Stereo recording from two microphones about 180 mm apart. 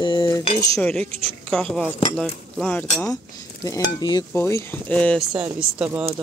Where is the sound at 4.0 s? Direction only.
25° left (ahead or behind).